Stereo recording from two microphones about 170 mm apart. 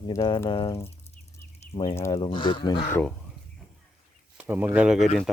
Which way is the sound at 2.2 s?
30° left (ahead or behind).